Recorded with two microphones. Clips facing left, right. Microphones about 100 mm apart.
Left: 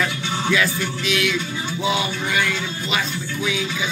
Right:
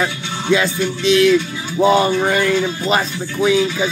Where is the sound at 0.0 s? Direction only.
25° right (ahead or behind).